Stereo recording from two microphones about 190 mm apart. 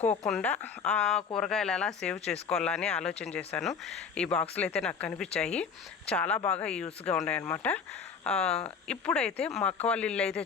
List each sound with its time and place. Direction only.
0.3 s speech: 5° left (ahead or behind)